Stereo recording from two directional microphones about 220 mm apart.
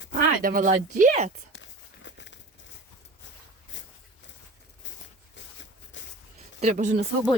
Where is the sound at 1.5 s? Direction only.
55° left (ahead or behind).